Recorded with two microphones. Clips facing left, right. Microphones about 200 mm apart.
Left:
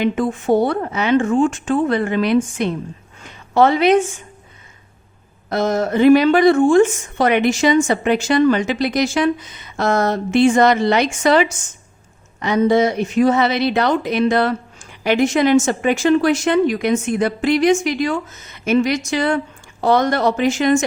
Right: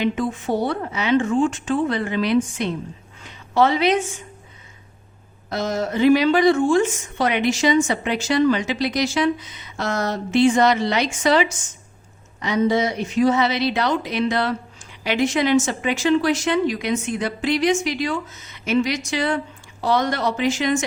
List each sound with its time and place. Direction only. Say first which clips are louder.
0.0 s a woman's voice: left 4 dB; 50° left (ahead or behind)
5.5 s speech: left 5 dB; 55° left (ahead or behind)